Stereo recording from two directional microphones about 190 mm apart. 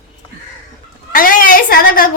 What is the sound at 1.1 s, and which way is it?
A woman's voice, 45° left (ahead or behind).